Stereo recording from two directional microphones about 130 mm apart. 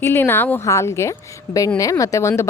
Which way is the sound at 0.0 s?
15° left (ahead or behind).